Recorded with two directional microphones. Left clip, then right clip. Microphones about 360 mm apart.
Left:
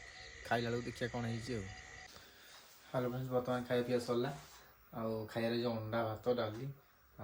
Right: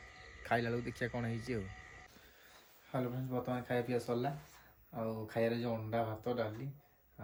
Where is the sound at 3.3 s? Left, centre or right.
Centre.